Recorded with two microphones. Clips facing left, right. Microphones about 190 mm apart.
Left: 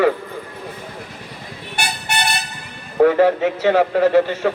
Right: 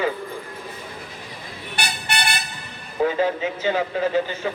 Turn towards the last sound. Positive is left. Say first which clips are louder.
# left 7 dB
turn(degrees=75)  # may be behind; listen again after turning